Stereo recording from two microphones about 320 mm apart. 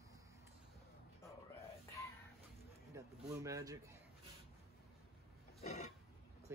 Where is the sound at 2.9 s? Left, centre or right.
Centre.